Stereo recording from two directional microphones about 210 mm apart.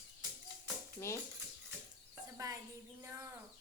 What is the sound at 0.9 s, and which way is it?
Speech, 15° left (ahead or behind).